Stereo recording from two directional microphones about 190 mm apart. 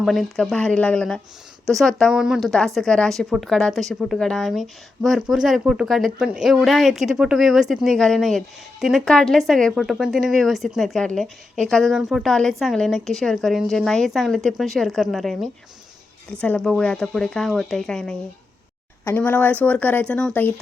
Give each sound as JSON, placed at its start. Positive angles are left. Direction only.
{"t": 0.0, "sound": "a woman's voice", "side_deg": 0}